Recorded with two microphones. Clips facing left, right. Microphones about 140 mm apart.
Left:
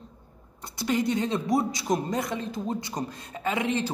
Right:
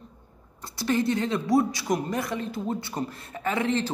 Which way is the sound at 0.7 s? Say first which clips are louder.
Right 1 dB; 20° left (ahead or behind).